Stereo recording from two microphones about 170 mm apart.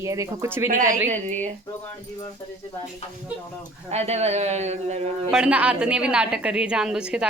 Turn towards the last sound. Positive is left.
turn(degrees=-5)  # may be behind; listen again after turning